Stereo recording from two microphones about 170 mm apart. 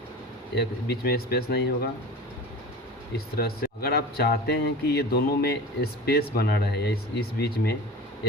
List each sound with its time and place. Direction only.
0.5 s speech: 65° left (ahead or behind)
3.3 s speech: 65° left (ahead or behind)